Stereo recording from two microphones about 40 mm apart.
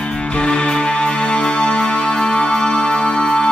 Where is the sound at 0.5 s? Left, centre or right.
Left.